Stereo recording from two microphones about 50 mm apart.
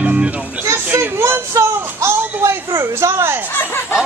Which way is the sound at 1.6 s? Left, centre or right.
Right.